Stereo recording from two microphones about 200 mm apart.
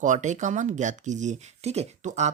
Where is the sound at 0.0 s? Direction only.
40° right (ahead or behind).